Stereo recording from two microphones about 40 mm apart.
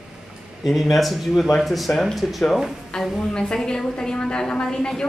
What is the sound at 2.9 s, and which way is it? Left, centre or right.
A woman's voice, centre.